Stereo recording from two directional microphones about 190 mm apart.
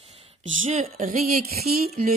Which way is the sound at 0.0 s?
30° right (ahead or behind).